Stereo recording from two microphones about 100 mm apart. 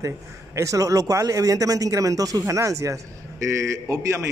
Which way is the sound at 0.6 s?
35° right (ahead or behind).